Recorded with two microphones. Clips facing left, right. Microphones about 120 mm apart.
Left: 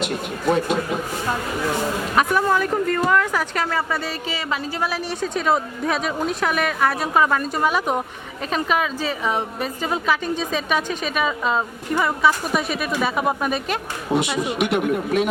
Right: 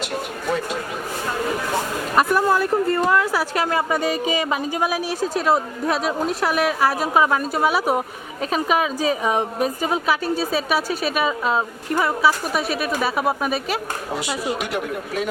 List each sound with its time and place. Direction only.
2.1 s speech: centre (ahead or behind)
14.2 s speech: 20° left (ahead or behind)